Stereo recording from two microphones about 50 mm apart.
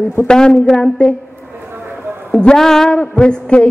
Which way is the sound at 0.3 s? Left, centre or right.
Centre.